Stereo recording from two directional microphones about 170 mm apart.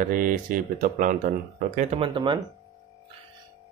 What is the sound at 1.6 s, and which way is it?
Speech, 45° right (ahead or behind).